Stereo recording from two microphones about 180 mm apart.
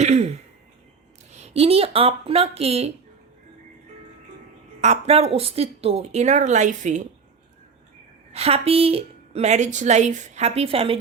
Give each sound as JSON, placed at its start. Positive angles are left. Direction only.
{"t": 0.0, "sound": "throat clearing", "side_deg": -40}
{"t": 1.3, "sound": "a woman's voice", "side_deg": -35}
{"t": 4.8, "sound": "a woman's voice", "side_deg": -35}
{"t": 8.3, "sound": "a woman's voice", "side_deg": -35}